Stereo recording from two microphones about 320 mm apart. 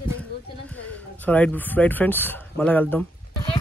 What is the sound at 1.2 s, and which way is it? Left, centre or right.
Speech, centre.